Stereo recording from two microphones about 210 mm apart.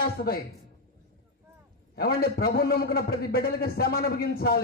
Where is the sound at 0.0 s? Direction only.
45° left (ahead or behind).